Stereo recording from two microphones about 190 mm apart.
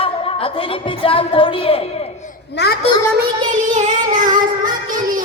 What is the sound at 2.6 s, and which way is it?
Speech, 60° left (ahead or behind).